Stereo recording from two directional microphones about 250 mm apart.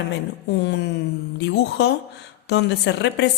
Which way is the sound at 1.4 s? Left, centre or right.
Left.